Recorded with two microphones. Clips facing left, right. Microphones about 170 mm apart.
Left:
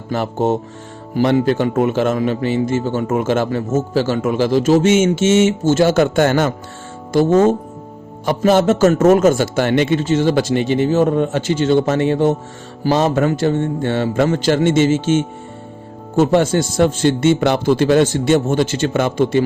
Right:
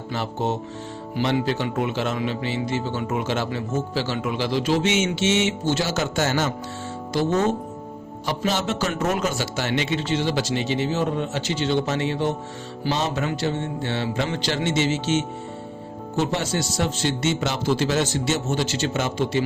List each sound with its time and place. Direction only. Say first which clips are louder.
0.1 s speech: left 8 dB; 50° left (ahead or behind)